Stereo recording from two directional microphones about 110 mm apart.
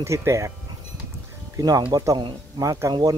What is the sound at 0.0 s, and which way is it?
Speech, 25° right (ahead or behind).